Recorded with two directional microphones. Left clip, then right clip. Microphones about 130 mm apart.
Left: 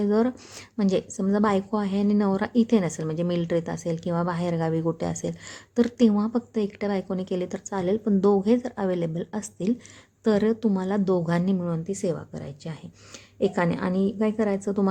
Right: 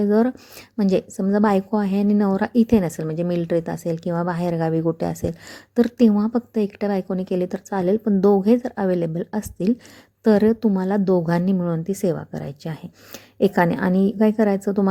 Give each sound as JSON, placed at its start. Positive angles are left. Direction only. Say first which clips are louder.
{"t": 0.0, "sound": "a woman's voice", "louder": "right 4 dB", "side_deg": -30}